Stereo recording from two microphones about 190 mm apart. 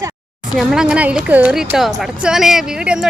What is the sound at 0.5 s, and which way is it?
Speech, 5° right (ahead or behind).